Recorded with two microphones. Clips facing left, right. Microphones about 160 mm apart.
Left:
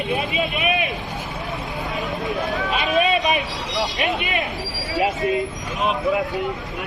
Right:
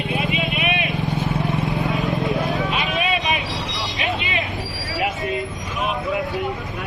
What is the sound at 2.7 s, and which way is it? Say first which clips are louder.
Vehicle: left 3 dB; 45° left (ahead or behind).